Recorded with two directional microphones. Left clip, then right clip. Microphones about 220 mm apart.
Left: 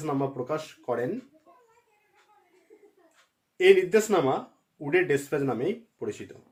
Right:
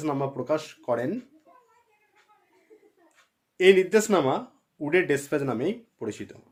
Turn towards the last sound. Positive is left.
turn(degrees=-50)  # may be behind; listen again after turning